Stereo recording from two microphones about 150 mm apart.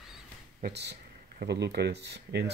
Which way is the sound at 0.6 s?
90° right.